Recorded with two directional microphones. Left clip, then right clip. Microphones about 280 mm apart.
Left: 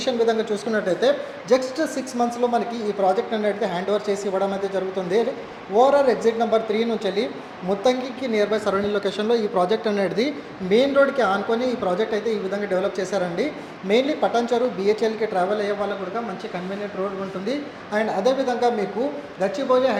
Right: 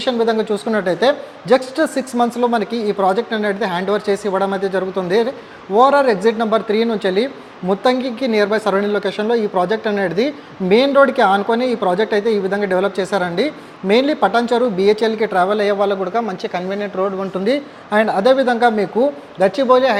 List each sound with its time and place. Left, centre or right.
0.0 s a woman's voice: right
10.7 s a woman's voice: right